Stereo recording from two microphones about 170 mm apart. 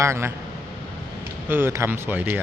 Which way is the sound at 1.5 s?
15° right (ahead or behind).